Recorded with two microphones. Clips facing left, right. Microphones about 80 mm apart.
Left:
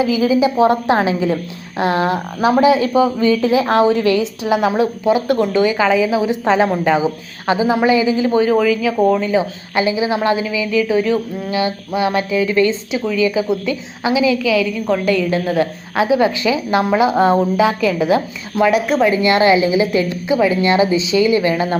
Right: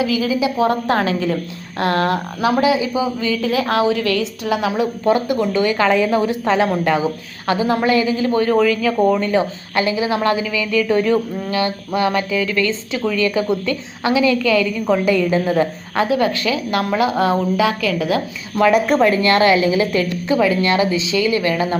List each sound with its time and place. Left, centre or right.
0.1 s speech: left
0.7 s a woman's voice: centre
2.4 s speech: left
2.8 s speech: left
3.7 s speech: left
4.2 s a woman's voice: centre
9.4 s a woman's voice: centre
11.9 s a woman's voice: centre
13.0 s a woman's voice: centre
16.0 s a woman's voice: centre
16.9 s a woman's voice: centre
17.6 s speech: left
17.9 s a woman's voice: centre
19.1 s speech: centre